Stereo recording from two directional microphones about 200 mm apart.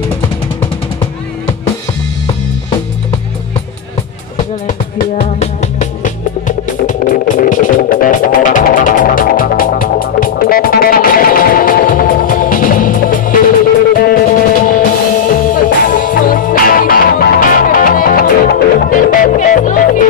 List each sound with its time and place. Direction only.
4.6 s music: 40° left (ahead or behind)